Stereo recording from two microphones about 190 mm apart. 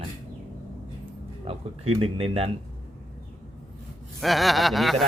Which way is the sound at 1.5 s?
30° right (ahead or behind).